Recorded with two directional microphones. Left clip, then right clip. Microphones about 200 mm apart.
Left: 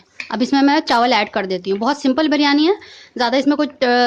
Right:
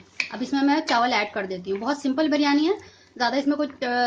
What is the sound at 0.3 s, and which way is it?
Speech, 45° left (ahead or behind).